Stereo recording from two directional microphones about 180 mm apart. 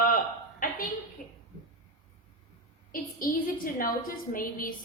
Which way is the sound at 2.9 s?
50° left (ahead or behind).